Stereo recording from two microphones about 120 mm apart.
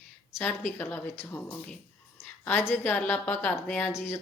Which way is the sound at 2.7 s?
15° left (ahead or behind).